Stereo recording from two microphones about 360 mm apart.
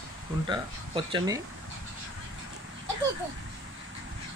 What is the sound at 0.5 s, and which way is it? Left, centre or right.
Speech, centre.